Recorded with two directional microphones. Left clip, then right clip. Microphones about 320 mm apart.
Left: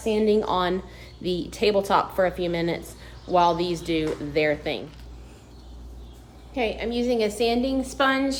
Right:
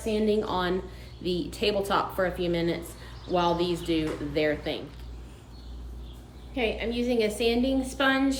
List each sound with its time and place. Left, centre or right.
0.0 s speech: left
6.5 s a woman's voice: centre